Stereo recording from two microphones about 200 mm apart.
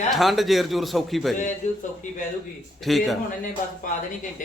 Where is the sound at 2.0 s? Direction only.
40° left (ahead or behind).